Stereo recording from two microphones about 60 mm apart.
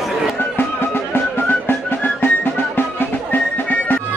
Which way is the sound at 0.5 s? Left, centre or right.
Left.